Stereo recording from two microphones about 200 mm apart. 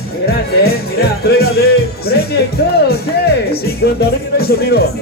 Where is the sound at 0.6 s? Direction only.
50° left (ahead or behind).